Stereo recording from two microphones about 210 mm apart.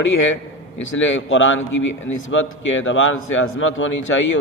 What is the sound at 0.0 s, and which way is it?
A man's voice, 65° left (ahead or behind).